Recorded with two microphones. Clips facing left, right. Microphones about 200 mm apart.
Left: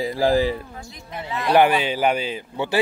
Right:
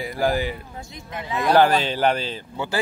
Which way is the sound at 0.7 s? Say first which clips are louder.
Even; 20° right (ahead or behind).